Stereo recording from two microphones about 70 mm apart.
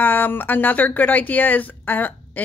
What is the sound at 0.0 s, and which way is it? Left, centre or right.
A woman's voice, left.